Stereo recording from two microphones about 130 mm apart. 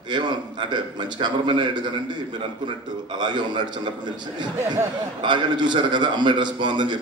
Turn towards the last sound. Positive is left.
turn(degrees=-35)  # may be behind; listen again after turning